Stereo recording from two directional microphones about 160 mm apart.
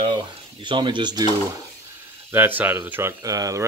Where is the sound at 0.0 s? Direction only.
30° right (ahead or behind).